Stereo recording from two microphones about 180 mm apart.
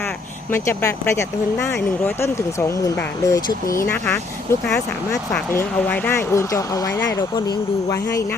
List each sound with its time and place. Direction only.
0.5 s speech: 15° left (ahead or behind)
5.3 s speech: 10° left (ahead or behind)